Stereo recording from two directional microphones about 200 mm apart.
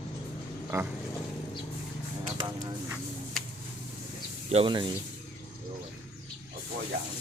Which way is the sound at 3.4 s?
Centre (ahead or behind).